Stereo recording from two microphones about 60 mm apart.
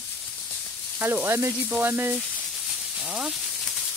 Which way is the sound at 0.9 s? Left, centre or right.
Right.